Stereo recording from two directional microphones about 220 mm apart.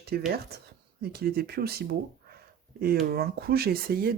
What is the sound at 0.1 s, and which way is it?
Speech, 45° right (ahead or behind).